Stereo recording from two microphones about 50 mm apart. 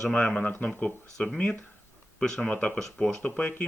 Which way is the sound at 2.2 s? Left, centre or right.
Centre.